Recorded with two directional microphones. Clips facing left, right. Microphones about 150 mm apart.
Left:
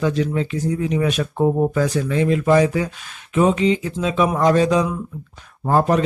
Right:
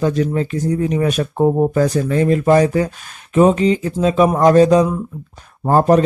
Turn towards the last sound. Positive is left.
turn(degrees=-40)  # may be behind; listen again after turning